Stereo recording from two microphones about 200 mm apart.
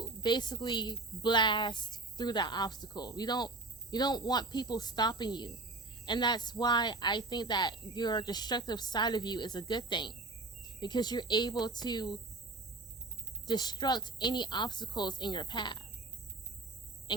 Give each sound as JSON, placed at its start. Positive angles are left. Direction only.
{"t": 0.0, "sound": "speech", "side_deg": 20}
{"t": 13.5, "sound": "speech", "side_deg": 20}
{"t": 17.1, "sound": "speech", "side_deg": 20}